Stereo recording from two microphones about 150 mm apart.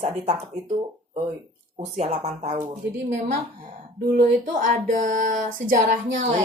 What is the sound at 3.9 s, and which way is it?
Speech, 75° right (ahead or behind).